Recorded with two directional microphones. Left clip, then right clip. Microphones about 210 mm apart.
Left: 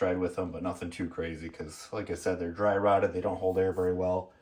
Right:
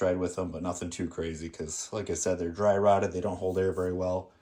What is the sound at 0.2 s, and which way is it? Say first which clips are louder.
Speech: even; 20° right (ahead or behind).